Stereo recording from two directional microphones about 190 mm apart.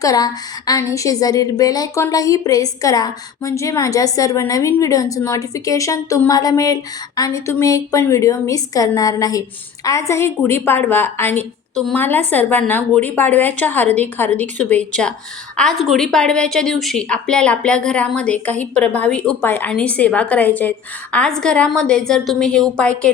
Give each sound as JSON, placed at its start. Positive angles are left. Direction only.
{"t": 0.0, "sound": "a woman's voice", "side_deg": 20}